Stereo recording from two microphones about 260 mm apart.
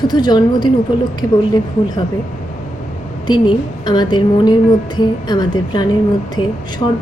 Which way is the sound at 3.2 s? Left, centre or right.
Centre.